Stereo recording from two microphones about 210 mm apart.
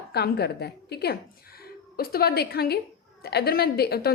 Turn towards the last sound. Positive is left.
turn(degrees=50)  # may be behind; listen again after turning